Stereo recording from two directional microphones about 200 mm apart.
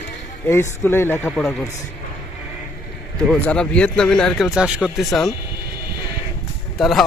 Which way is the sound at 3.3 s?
5° left (ahead or behind).